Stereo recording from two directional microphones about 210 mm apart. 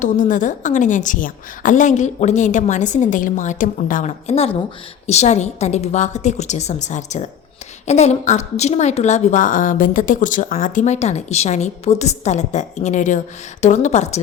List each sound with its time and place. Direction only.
0.0 s a woman's voice: 35° left (ahead or behind)